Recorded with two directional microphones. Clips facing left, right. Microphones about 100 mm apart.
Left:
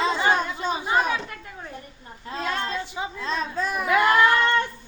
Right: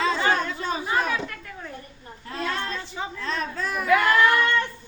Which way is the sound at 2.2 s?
20° left (ahead or behind).